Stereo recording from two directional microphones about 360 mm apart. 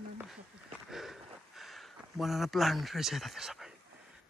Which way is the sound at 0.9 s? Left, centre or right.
Centre.